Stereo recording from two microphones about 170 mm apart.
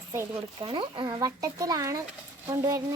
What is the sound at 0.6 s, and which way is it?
Speech, 30° right (ahead or behind).